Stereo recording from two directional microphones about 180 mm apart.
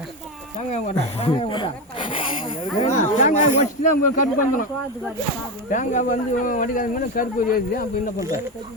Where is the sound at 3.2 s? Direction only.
45° left (ahead or behind).